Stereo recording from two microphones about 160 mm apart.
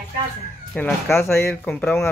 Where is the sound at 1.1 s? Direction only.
15° left (ahead or behind).